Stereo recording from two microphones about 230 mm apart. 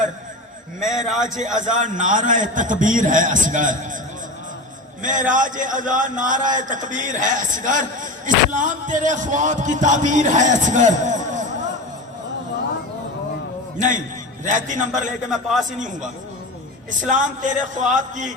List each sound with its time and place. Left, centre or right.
0.8 s a man's voice: centre
1.2 s speech: right
5.0 s speech: right
13.7 s a man's voice: right
15.3 s a man's voice: centre
17.2 s speech: right